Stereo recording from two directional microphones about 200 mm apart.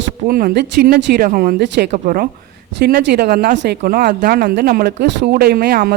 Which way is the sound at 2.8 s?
55° right (ahead or behind).